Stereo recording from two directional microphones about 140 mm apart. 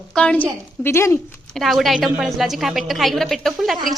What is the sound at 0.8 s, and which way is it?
Speech, 20° left (ahead or behind).